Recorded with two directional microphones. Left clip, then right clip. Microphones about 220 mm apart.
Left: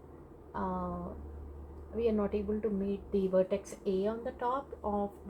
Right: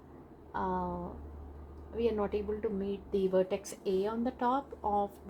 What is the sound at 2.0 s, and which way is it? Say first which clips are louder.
A woman's voice: even; 35° right (ahead or behind).